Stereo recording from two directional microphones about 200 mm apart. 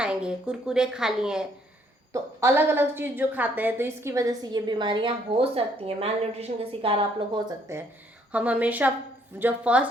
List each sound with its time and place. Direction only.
0.0 s a woman's voice: 5° right (ahead or behind); by 7.0 s 25° right (ahead or behind)
7.4 s a woman's voice: 15° right (ahead or behind)